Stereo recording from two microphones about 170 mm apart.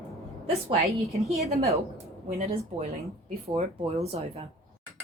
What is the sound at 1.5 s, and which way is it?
Speech, 35° right (ahead or behind).